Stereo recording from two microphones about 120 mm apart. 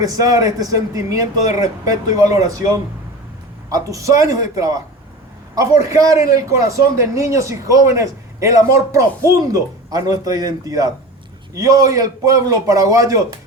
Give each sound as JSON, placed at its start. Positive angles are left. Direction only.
{"t": 0.0, "sound": "a man's voice", "side_deg": -30}